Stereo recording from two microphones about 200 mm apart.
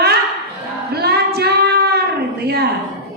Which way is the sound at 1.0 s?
50° right (ahead or behind).